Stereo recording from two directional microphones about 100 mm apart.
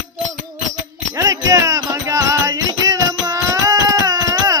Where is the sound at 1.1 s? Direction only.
35° right (ahead or behind).